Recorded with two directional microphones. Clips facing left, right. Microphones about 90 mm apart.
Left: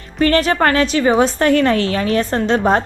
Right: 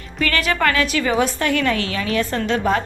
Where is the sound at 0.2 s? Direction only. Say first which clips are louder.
Left 6 dB; 35° left (ahead or behind).